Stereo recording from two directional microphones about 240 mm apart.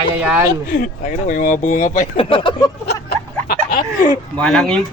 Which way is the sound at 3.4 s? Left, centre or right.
Left.